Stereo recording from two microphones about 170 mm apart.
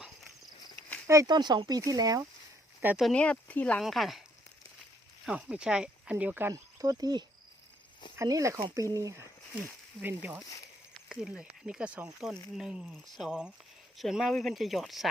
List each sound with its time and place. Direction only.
1.0 s speech: 20° right (ahead or behind)
2.8 s speech: 5° right (ahead or behind)
3.1 s speech: 5° left (ahead or behind)
5.2 s speech: 5° right (ahead or behind)